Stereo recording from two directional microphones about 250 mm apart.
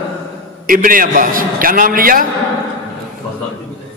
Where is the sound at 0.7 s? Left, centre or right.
Right.